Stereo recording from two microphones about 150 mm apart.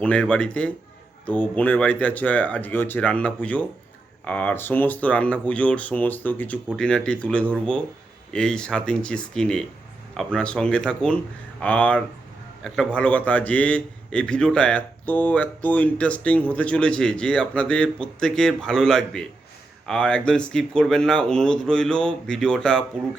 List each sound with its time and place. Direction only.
0.0 s a man's voice: 10° left (ahead or behind)